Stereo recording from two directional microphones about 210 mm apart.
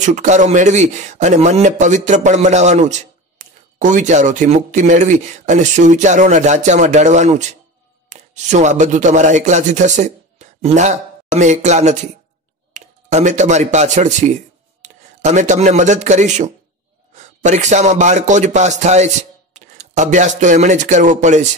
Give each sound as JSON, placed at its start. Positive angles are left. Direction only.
{"t": 0.0, "sound": "a man's voice", "side_deg": -35}